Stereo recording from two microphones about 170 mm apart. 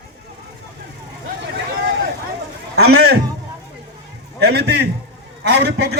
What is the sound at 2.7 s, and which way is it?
Speech, 75° right (ahead or behind).